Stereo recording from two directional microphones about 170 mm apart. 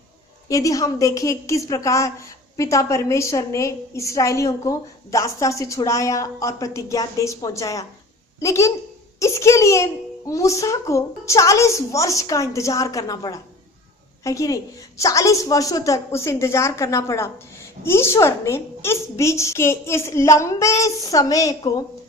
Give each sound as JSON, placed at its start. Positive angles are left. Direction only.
{"t": 0.4, "sound": "a woman's voice", "side_deg": 20}